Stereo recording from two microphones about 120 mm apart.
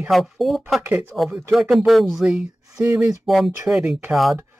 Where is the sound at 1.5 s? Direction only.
Centre (ahead or behind).